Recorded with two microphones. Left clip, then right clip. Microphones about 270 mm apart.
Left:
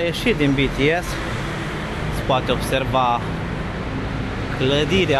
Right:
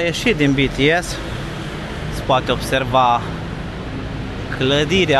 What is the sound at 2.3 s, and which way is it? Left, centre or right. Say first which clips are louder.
Speech: right 3 dB; right.